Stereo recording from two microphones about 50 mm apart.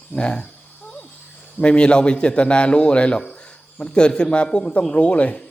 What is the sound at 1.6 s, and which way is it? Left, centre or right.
A man's voice, left.